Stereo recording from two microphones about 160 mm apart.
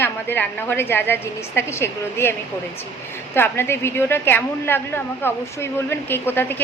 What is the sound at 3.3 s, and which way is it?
A woman's voice, 15° left (ahead or behind).